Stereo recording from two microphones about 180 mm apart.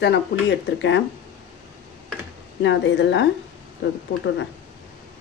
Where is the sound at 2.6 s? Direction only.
75° left (ahead or behind).